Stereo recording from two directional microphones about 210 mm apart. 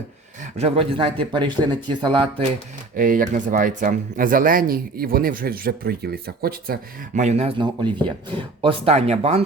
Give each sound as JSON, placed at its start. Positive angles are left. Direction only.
{"t": 0.5, "sound": "speech", "side_deg": -30}
{"t": 2.9, "sound": "speech", "side_deg": -40}
{"t": 7.2, "sound": "speech", "side_deg": -30}